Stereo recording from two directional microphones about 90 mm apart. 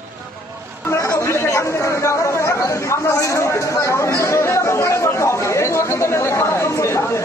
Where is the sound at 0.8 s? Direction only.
30° left (ahead or behind).